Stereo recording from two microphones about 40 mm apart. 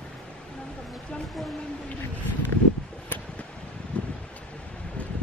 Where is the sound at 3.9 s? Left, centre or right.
Left.